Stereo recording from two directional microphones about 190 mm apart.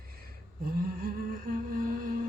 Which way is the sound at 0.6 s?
50° right (ahead or behind).